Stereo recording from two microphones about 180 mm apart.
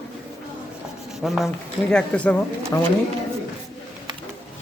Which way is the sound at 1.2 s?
Centre (ahead or behind).